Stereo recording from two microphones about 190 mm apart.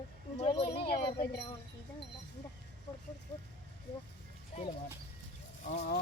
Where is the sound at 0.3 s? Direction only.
30° left (ahead or behind).